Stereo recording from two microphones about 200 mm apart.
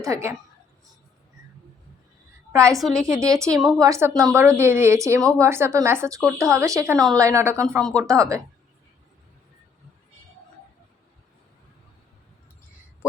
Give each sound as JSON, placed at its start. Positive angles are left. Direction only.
{"t": 0.0, "sound": "a woman's voice", "side_deg": -15}
{"t": 2.5, "sound": "a woman's voice", "side_deg": -15}
{"t": 2.8, "sound": "a woman's voice", "side_deg": 5}
{"t": 3.1, "sound": "a woman's voice", "side_deg": -15}